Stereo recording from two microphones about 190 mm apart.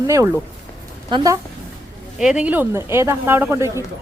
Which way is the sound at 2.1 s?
5° right (ahead or behind).